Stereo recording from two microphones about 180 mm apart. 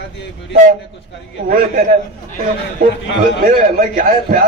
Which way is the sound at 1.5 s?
50° right (ahead or behind).